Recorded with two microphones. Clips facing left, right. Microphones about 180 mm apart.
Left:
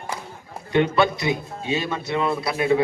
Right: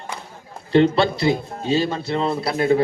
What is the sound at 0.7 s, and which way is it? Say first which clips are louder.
A man's voice: right 3 dB; 30° right (ahead or behind).